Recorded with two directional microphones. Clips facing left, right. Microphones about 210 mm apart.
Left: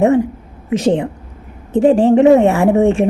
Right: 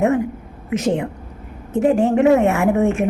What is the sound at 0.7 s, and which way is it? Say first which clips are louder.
A woman's voice: left 5 dB; 30° left (ahead or behind).